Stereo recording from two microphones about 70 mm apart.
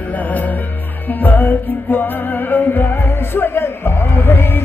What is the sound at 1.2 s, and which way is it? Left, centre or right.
Music, left.